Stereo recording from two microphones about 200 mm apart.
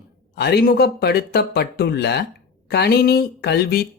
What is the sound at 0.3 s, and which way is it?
Speech, 55° left (ahead or behind).